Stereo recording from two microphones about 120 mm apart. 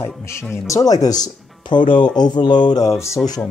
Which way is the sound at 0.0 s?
20° left (ahead or behind).